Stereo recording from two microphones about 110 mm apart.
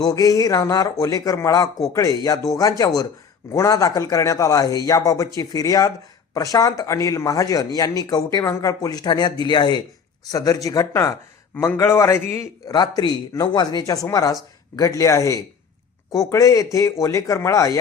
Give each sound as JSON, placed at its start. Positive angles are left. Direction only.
{"t": 0.0, "sound": "speech", "side_deg": 35}
{"t": 12.7, "sound": "speech", "side_deg": 40}